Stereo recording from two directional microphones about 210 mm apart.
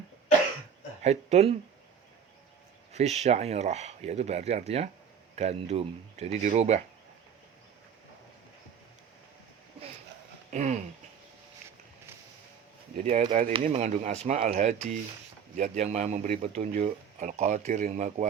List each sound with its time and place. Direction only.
1.0 s speech: 30° right (ahead or behind)
2.9 s speech: 30° right (ahead or behind)
10.5 s speech: 35° right (ahead or behind)
13.0 s speech: 30° right (ahead or behind)